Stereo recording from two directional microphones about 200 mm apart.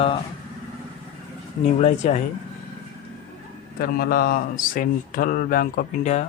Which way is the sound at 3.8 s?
50° left (ahead or behind).